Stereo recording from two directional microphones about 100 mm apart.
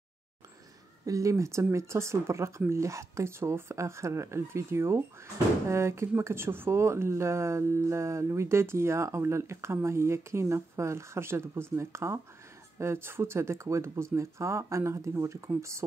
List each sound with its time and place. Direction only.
1.0 s speech: 30° right (ahead or behind)